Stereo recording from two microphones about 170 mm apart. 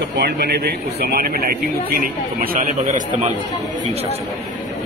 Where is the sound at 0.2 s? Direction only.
75° right (ahead or behind); by 2.7 s 55° right (ahead or behind).